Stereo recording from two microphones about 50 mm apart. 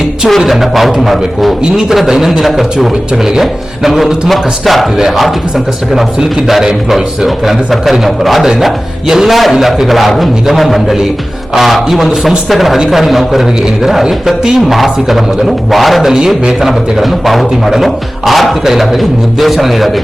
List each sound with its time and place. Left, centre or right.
0.3 s a man's voice: centre
16.4 s speech: centre
16.6 s a man's voice: centre